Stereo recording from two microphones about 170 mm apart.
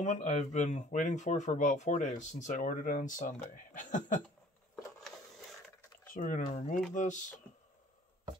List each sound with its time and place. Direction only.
0.0 s speech: 45° left (ahead or behind)
6.1 s speech: 50° left (ahead or behind)